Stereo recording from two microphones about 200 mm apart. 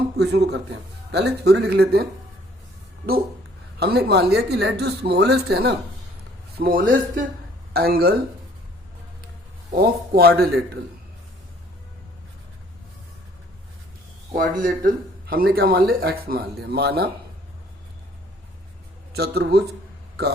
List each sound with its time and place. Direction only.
0.2 s speech: 55° right (ahead or behind)
3.8 s speech: 50° right (ahead or behind)
6.6 s speech: 45° right (ahead or behind)
9.7 s speech: 50° right (ahead or behind)
14.3 s speech: 45° right (ahead or behind)
19.1 s speech: 55° right (ahead or behind)